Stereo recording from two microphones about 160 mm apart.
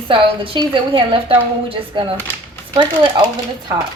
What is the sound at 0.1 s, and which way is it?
A woman's voice, 35° right (ahead or behind).